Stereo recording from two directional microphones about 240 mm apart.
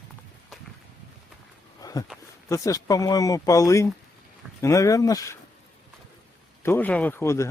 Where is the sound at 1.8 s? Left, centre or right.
Centre.